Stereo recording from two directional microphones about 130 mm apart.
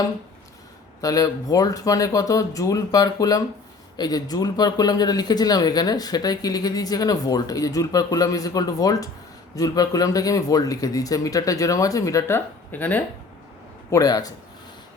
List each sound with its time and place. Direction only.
1.0 s speech: 30° left (ahead or behind)
12.7 s speech: 15° left (ahead or behind)
13.9 s speech: 30° left (ahead or behind)